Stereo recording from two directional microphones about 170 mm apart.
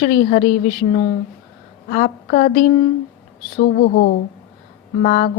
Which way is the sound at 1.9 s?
50° left (ahead or behind).